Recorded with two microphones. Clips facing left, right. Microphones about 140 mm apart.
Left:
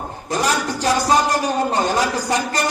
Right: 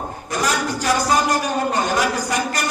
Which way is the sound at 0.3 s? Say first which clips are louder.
Left 2 dB; 30° left (ahead or behind).